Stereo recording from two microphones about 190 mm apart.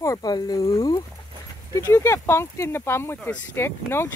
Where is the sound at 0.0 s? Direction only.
20° left (ahead or behind).